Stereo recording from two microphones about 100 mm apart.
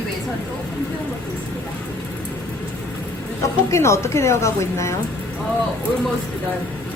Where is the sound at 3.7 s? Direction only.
30° left (ahead or behind).